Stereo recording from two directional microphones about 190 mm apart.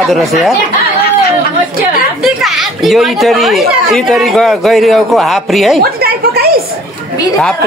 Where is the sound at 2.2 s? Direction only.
Centre (ahead or behind).